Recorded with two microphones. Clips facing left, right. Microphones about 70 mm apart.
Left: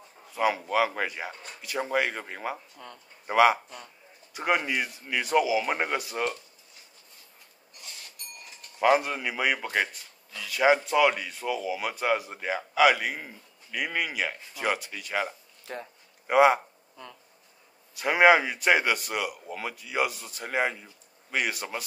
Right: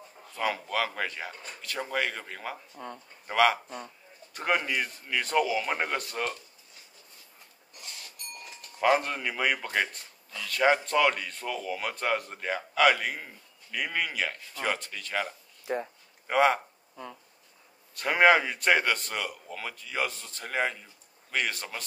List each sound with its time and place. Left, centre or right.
0.3 s speech: centre
8.7 s speech: centre
15.6 s speech: centre
16.3 s speech: centre
16.9 s speech: centre
17.9 s speech: centre